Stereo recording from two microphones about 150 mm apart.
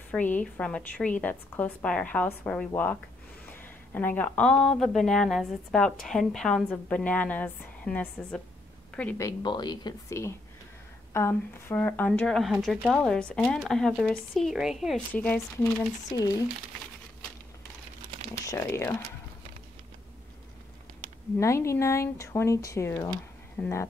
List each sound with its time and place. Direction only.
0.1 s a woman's voice: 10° left (ahead or behind)
9.2 s a woman's voice: 30° left (ahead or behind); by 15.0 s 5° right (ahead or behind)
15.1 s a woman's voice: 10° left (ahead or behind)
15.6 s speech: 25° left (ahead or behind)
18.4 s a woman's voice: 20° left (ahead or behind)
21.4 s a woman's voice: 20° left (ahead or behind)